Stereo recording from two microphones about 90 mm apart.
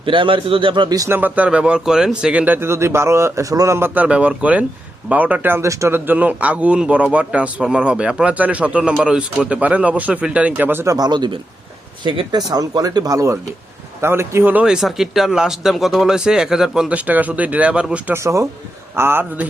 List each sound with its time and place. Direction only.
0.0 s a man's voice: 70° right (ahead or behind)
1.0 s speech: 25° right (ahead or behind)
1.5 s speech: 10° right (ahead or behind)
2.4 s speech: 25° right (ahead or behind); by 3.8 s 40° right (ahead or behind)
3.8 s speech: 20° right (ahead or behind)
6.1 s speech: 20° right (ahead or behind)
10.9 s speech: 50° right (ahead or behind); by 14.6 s 25° right (ahead or behind)
14.6 s speech: 5° right (ahead or behind)
16.9 s speech: 20° right (ahead or behind)
18.1 s speech: 35° right (ahead or behind)